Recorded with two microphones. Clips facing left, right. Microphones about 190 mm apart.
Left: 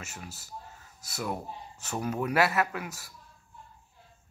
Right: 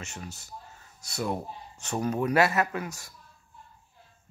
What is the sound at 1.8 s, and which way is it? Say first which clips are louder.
A man's voice: right 3 dB; 5° left (ahead or behind).